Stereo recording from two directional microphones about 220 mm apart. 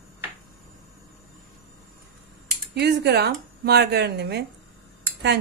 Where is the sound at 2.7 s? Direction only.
50° right (ahead or behind).